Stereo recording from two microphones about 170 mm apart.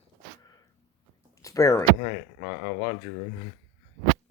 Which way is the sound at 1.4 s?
20° left (ahead or behind).